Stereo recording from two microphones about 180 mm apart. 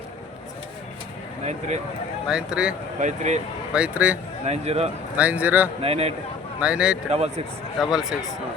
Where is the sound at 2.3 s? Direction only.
5° right (ahead or behind).